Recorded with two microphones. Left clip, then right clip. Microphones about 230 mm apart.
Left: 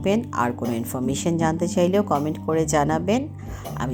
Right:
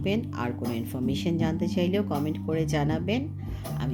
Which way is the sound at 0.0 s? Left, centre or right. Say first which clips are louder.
Left 8 dB; centre.